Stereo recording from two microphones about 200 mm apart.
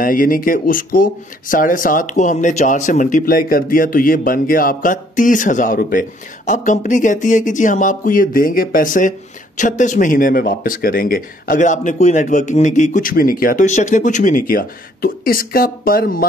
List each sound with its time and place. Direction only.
0.0 s speech: 45° left (ahead or behind)